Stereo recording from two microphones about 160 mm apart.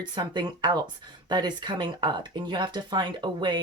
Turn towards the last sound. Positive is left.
turn(degrees=-30)  # may be behind; listen again after turning